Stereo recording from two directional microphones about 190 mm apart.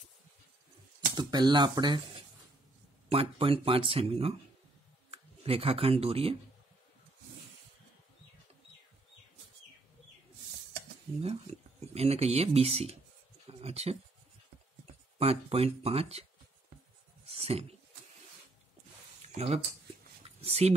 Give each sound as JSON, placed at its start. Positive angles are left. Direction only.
{"t": 1.1, "sound": "speech", "side_deg": -20}
{"t": 11.9, "sound": "speech", "side_deg": -35}
{"t": 13.5, "sound": "a sound", "side_deg": -30}
{"t": 15.1, "sound": "speech", "side_deg": -30}
{"t": 17.3, "sound": "speech", "side_deg": -30}
{"t": 19.2, "sound": "speech", "side_deg": -35}
{"t": 20.2, "sound": "a sound", "side_deg": -30}